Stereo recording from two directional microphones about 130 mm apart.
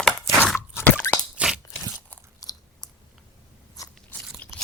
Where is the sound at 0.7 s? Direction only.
15° left (ahead or behind).